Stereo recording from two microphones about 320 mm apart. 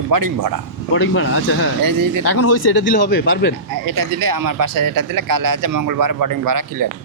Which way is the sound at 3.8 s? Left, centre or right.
Right.